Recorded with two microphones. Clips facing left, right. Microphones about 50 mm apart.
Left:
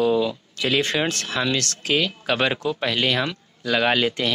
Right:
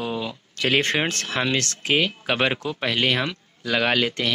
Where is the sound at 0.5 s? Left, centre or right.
Right; by 4.3 s centre.